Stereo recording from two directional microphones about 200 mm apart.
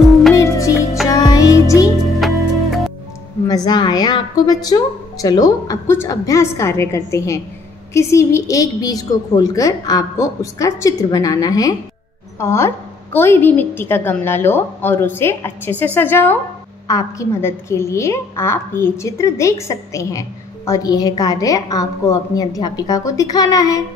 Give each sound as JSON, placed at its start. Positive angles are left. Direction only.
{"t": 0.4, "sound": "music", "side_deg": 15}
{"t": 2.1, "sound": "music", "side_deg": 0}
{"t": 3.4, "sound": "a woman's voice", "side_deg": 20}